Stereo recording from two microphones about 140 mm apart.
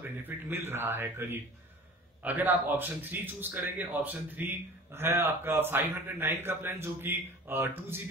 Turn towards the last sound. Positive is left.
turn(degrees=-15)  # may be behind; listen again after turning